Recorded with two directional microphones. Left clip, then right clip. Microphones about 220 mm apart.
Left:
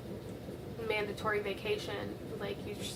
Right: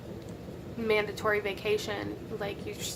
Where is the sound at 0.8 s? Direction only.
45° right (ahead or behind).